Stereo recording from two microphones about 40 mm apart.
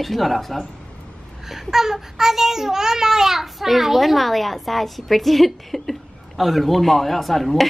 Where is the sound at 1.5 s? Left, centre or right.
Centre.